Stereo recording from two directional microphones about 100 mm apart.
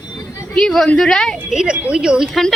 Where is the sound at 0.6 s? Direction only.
5° left (ahead or behind).